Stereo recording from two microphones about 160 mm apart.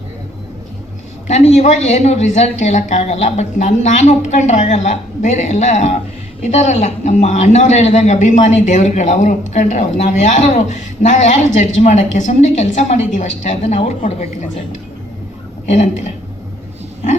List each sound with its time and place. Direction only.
1.3 s a man's voice: 45° left (ahead or behind)
15.6 s a man's voice: 50° left (ahead or behind)